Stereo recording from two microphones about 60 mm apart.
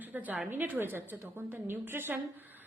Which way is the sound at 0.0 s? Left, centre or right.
Right.